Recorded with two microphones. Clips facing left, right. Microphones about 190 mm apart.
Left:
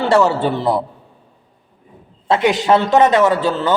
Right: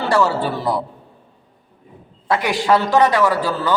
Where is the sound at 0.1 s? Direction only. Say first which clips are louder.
Left 3 dB; 25° left (ahead or behind).